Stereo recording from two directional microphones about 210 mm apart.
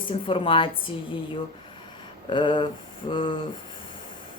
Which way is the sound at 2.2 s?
25° left (ahead or behind).